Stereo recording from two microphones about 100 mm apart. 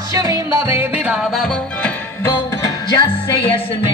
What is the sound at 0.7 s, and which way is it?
Music, 15° right (ahead or behind).